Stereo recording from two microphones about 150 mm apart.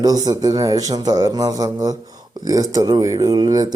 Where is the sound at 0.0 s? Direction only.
25° right (ahead or behind).